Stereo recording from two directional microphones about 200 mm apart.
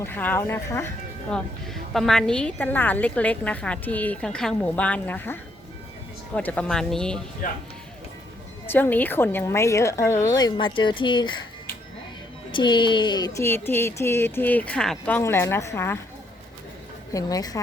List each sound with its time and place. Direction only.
0.0 s a woman's voice: 10° left (ahead or behind)
1.6 s a woman's voice: centre (ahead or behind)
8.6 s a woman's voice: 10° left (ahead or behind)
12.5 s a woman's voice: 25° left (ahead or behind)
17.1 s a woman's voice: 15° left (ahead or behind)